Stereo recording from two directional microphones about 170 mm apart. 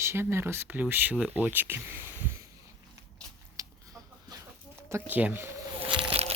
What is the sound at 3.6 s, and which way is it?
Chicken, 20° right (ahead or behind).